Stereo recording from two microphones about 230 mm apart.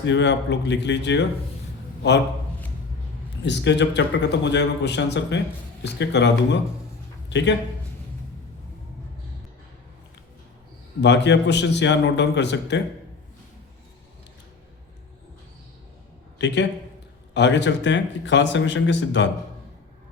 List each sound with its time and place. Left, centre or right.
0.0 s a man's voice: left
3.4 s a man's voice: left
11.0 s a man's voice: left
16.4 s a man's voice: left